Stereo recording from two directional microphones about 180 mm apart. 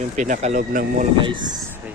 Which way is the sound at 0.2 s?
45° right (ahead or behind).